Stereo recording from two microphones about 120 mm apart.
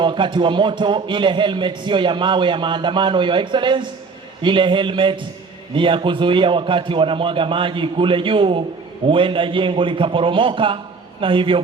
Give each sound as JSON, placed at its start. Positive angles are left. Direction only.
{"t": 0.0, "sound": "a man's voice", "side_deg": -40}